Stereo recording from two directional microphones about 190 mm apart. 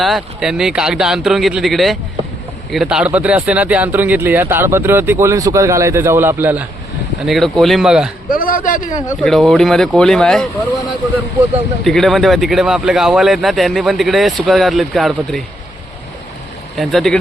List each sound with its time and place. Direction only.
0.0 s speech: centre (ahead or behind)
7.3 s speech: centre (ahead or behind)
8.3 s a man's voice: 50° left (ahead or behind)
8.9 s speech: 20° left (ahead or behind)
9.2 s speech: centre (ahead or behind)
11.8 s speech: centre (ahead or behind)
16.7 s speech: centre (ahead or behind)